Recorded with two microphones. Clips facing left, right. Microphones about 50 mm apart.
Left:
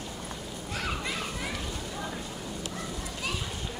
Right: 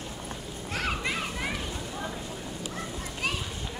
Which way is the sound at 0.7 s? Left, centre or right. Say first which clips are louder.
Right 3 dB; right.